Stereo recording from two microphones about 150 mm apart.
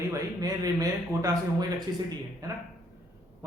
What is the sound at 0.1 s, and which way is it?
A man's voice, 25° right (ahead or behind).